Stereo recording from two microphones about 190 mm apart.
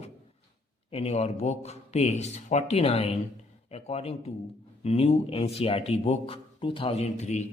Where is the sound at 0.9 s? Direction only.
35° left (ahead or behind).